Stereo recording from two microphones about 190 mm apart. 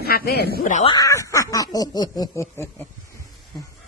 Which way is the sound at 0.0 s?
55° left (ahead or behind).